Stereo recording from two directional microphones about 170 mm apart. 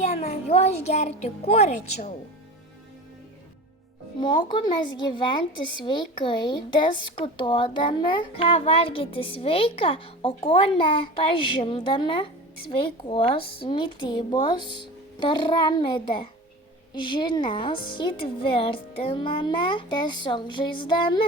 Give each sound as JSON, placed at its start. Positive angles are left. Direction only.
{"t": 0.0, "sound": "a child's voice", "side_deg": 40}
{"t": 4.2, "sound": "a woman's voice", "side_deg": 25}
{"t": 19.1, "sound": "a woman's voice", "side_deg": 30}